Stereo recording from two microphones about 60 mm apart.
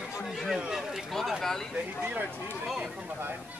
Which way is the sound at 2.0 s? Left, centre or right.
Right.